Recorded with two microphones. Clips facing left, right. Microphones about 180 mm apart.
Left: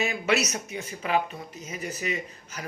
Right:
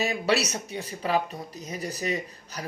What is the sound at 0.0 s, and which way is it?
A woman's voice, 35° right (ahead or behind).